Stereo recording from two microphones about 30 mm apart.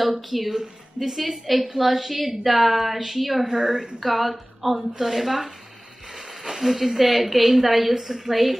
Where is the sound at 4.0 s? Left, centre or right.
Centre.